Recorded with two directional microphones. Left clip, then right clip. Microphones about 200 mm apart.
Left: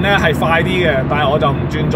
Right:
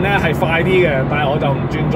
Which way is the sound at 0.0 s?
20° left (ahead or behind).